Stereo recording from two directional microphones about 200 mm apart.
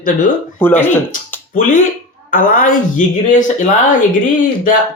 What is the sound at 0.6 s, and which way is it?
Speech, 10° left (ahead or behind).